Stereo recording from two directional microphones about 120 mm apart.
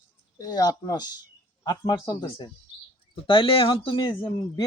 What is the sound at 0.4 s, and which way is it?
A man's voice, 30° left (ahead or behind).